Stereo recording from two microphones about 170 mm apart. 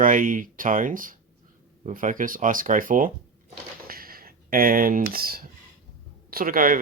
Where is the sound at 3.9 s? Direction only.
60° right (ahead or behind).